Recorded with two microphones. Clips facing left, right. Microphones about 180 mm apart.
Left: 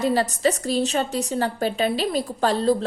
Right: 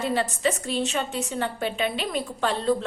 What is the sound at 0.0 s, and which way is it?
A woman's voice, 40° left (ahead or behind).